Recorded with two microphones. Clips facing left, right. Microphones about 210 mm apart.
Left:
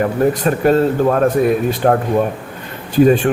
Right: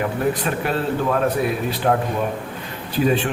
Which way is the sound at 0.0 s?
45° left (ahead or behind).